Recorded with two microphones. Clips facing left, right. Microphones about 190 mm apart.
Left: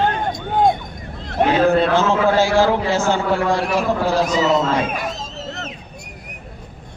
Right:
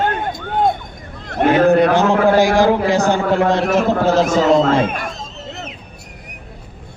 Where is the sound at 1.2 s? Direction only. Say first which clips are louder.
Right 1 dB; 50° right (ahead or behind).